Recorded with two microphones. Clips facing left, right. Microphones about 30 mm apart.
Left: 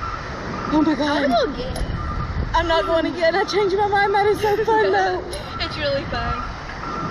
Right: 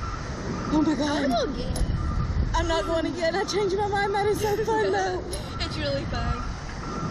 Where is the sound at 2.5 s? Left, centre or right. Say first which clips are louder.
Left 7 dB; left.